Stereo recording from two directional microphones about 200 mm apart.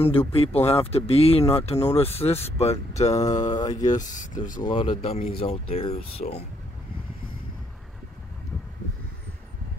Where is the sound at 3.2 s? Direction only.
15° left (ahead or behind).